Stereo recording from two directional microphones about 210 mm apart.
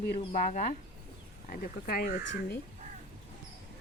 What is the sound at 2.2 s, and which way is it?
Speech, 60° left (ahead or behind).